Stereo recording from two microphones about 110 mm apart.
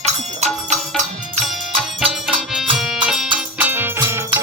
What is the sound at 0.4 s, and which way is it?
Music, 90° right.